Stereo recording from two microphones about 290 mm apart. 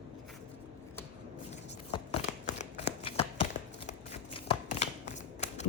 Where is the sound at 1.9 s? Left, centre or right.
Left.